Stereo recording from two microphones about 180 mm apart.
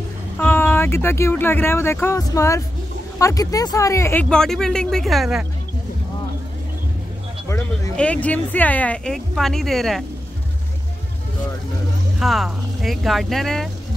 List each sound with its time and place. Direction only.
0.4 s speech: 10° left (ahead or behind)
7.4 s speech: 15° left (ahead or behind)
12.2 s speech: centre (ahead or behind)